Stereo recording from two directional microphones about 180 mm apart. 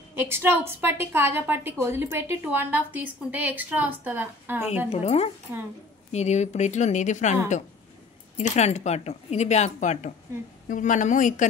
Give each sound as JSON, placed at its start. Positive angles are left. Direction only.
{"t": 0.1, "sound": "a woman's voice", "side_deg": -10}
{"t": 4.8, "sound": "a woman's voice", "side_deg": 35}